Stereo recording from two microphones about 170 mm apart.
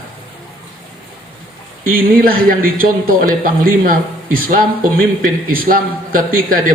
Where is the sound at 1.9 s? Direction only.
60° right (ahead or behind).